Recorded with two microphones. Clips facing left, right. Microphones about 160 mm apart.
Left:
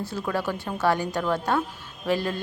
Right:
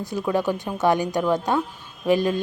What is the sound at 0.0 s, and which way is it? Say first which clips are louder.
A woman's voice: right 5 dB; 15° right (ahead or behind).